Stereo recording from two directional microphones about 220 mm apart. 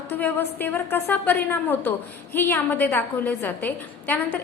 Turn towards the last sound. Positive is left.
turn(degrees=10)  # may be behind; listen again after turning